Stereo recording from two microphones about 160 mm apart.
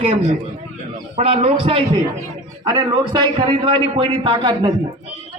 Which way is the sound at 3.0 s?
30° right (ahead or behind).